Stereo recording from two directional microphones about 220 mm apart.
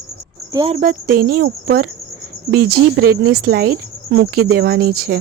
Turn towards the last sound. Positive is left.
turn(degrees=-40)  # may be behind; listen again after turning